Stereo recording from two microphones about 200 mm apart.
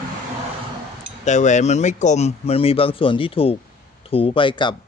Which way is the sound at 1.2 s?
35° left (ahead or behind).